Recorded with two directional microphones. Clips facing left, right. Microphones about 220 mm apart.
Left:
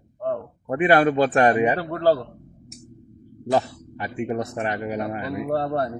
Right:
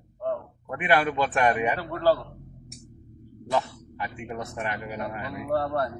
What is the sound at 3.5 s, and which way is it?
Speech, 40° left (ahead or behind).